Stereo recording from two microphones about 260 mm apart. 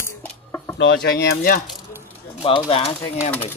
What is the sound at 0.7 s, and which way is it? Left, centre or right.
Speech, left.